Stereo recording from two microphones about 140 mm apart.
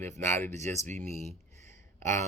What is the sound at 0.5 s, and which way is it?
Speech, 55° right (ahead or behind).